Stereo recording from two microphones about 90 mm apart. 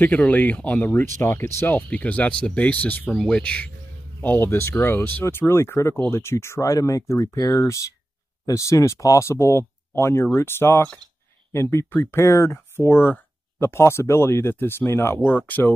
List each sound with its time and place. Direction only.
0.0 s speech: 20° left (ahead or behind)
1.8 s speech: 15° left (ahead or behind)
4.2 s speech: 20° left (ahead or behind)